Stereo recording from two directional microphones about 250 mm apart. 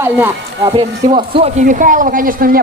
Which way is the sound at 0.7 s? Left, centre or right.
Right.